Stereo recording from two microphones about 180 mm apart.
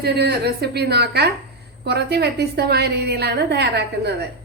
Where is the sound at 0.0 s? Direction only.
65° right (ahead or behind).